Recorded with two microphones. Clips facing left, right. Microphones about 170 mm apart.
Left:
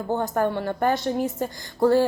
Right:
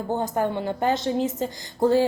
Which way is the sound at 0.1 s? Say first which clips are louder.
Left 1 dB; 15° right (ahead or behind).